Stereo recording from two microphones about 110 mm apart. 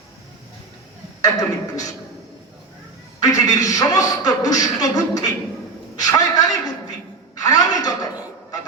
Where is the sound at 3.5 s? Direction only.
30° left (ahead or behind).